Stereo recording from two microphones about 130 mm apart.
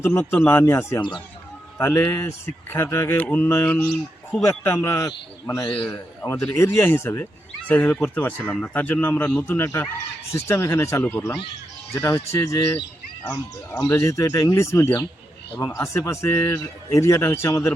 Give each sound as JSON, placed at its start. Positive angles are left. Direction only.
{"t": 0.0, "sound": "a man's voice", "side_deg": 20}